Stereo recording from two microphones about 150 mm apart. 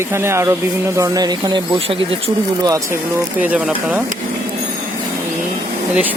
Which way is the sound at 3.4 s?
10° right (ahead or behind).